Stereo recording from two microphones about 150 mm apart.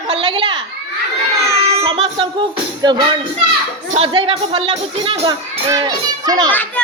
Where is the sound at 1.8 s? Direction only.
40° right (ahead or behind).